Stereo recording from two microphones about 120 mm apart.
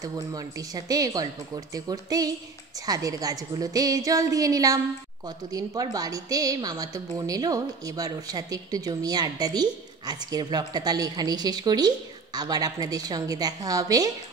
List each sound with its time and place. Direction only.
0.0 s a woman's voice: 30° right (ahead or behind)